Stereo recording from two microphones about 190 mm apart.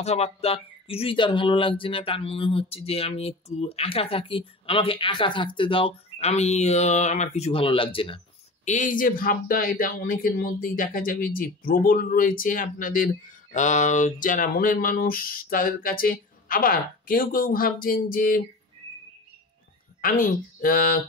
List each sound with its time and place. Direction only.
0.0 s speech: 35° left (ahead or behind)
8.6 s speech: 45° left (ahead or behind)
20.2 s speech: 50° left (ahead or behind)